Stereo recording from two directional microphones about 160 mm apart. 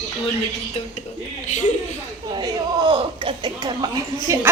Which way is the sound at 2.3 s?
30° right (ahead or behind).